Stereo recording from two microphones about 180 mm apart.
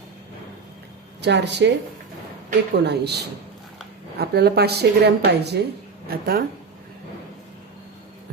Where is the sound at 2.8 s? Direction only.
65° right (ahead or behind).